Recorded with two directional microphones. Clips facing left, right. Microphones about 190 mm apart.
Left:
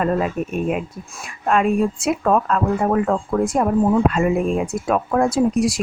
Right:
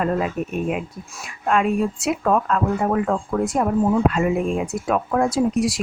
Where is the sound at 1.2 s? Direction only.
40° left (ahead or behind).